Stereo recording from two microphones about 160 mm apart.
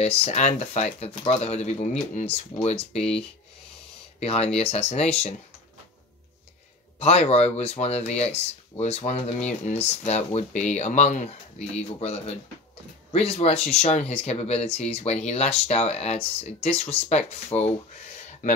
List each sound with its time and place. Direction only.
0.0 s speech: 40° left (ahead or behind)
7.0 s speech: 40° left (ahead or behind)